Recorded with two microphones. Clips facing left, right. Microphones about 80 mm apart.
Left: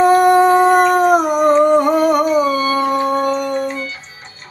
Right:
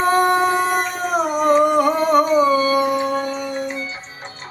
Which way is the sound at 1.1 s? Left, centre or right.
Left.